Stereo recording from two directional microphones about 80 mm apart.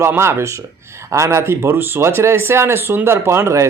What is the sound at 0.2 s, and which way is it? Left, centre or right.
Speech, right.